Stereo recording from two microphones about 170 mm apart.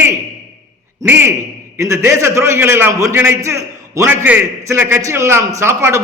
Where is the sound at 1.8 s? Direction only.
15° right (ahead or behind).